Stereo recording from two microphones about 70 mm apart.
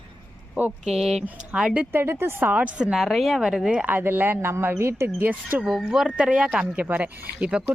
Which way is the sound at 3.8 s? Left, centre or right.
Right.